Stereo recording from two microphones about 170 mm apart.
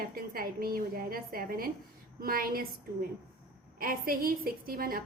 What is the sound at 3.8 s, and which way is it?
A woman's voice, 55° right (ahead or behind).